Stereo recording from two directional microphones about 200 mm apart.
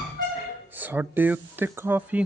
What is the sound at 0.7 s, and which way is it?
Speech, 10° right (ahead or behind).